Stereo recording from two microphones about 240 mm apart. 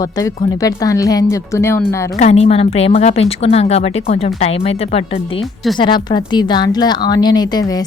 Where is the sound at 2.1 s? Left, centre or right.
Left.